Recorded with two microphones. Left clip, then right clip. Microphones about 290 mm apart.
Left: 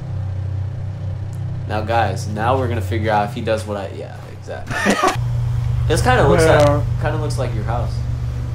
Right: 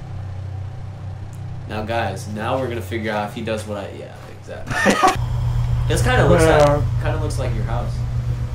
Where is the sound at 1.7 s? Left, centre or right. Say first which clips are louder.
Left 5 dB; centre.